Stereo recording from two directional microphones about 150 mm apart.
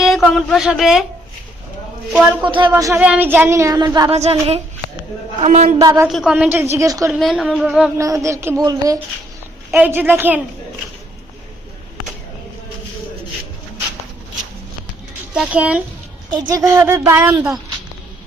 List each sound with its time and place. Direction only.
0.0 s speech: centre (ahead or behind)
2.4 s speech: 35° right (ahead or behind)
2.7 s a sound: 20° right (ahead or behind)
3.0 s a sound: 10° right (ahead or behind); by 4.1 s 25° right (ahead or behind)
4.1 s speech: 40° right (ahead or behind)
5.8 s a woman's voice: 15° right (ahead or behind)
6.1 s a woman's voice: 5° right (ahead or behind); by 7.1 s 20° right (ahead or behind)
7.1 s speech: centre (ahead or behind)
7.9 s a sound: 20° right (ahead or behind)
9.7 s a woman's voice: 10° right (ahead or behind)
15.3 s a woman's voice: 5° right (ahead or behind)
16.3 s a sound: 30° right (ahead or behind)
16.7 s a woman's voice: 15° right (ahead or behind)